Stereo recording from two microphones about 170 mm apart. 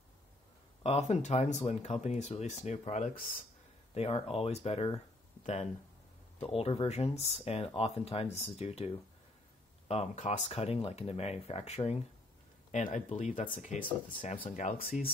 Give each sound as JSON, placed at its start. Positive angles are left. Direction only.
{"t": 0.8, "sound": "speech", "side_deg": 40}
{"t": 3.9, "sound": "speech", "side_deg": 35}